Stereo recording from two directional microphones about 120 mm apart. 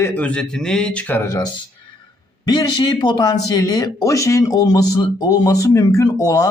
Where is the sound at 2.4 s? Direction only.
35° left (ahead or behind).